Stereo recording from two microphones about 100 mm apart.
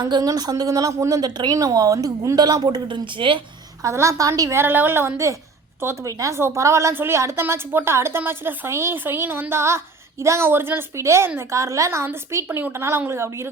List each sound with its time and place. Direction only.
0.0 s a woman's voice: 40° right (ahead or behind); by 3.4 s 55° right (ahead or behind)
3.8 s a woman's voice: 30° right (ahead or behind)